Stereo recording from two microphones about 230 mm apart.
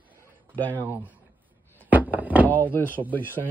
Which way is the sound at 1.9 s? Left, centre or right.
Centre.